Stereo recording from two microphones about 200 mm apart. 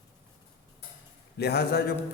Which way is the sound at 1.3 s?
55° left (ahead or behind).